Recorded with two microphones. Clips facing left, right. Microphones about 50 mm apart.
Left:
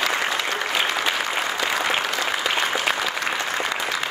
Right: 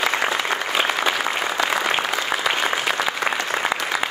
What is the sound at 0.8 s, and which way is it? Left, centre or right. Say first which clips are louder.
Applause: right 2 dB; centre.